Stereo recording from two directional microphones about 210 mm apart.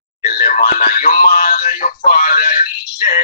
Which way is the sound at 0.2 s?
45° left (ahead or behind).